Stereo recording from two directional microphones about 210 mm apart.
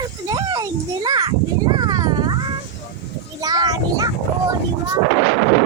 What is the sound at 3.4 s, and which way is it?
Speech, 20° right (ahead or behind).